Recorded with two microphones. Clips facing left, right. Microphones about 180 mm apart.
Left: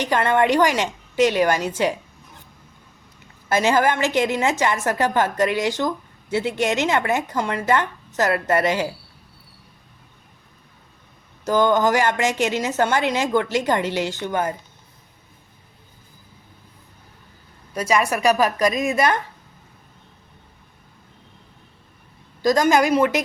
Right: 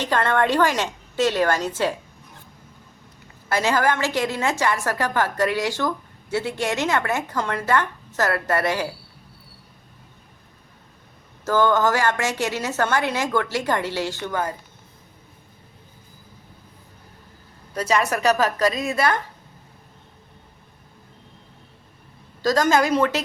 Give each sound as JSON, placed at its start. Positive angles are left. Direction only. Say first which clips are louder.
{"t": 0.0, "sound": "a woman's voice", "louder": "left 2 dB", "side_deg": 15}
{"t": 3.5, "sound": "speech", "louder": "left 2 dB", "side_deg": 20}
{"t": 11.4, "sound": "a woman's voice", "louder": "left 1 dB", "side_deg": 15}
{"t": 17.7, "sound": "a woman's voice", "louder": "left 1 dB", "side_deg": 10}
{"t": 22.4, "sound": "a woman's voice", "louder": "left 2 dB", "side_deg": 15}